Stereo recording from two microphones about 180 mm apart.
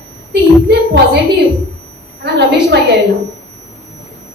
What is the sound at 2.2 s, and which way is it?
Speech, 70° right (ahead or behind).